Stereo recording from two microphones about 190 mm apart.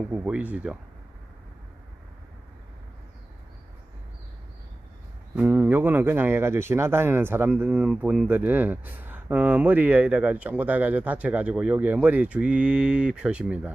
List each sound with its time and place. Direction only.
0.1 s speech: 5° right (ahead or behind)
5.3 s speech: 10° right (ahead or behind)